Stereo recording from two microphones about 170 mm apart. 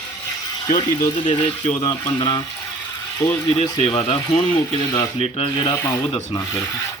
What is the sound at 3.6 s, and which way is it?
Speech, 35° left (ahead or behind).